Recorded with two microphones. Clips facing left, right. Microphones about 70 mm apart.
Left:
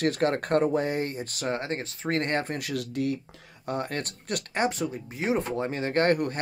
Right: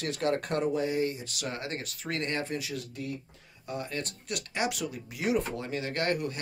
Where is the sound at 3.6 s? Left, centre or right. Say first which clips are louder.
Left 5 dB; left.